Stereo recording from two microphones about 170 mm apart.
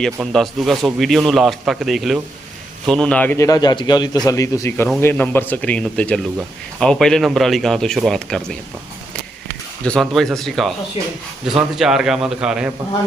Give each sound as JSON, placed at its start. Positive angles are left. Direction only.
{"t": 0.0, "sound": "a man's voice", "side_deg": 0}
{"t": 9.8, "sound": "speech", "side_deg": 5}